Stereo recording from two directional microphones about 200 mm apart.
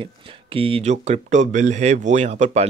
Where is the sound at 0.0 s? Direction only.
25° right (ahead or behind).